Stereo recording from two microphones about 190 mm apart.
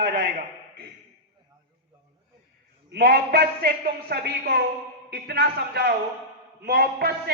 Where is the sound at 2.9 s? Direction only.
55° right (ahead or behind).